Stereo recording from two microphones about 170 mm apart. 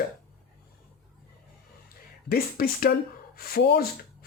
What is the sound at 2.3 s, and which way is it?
Speech, 60° left (ahead or behind).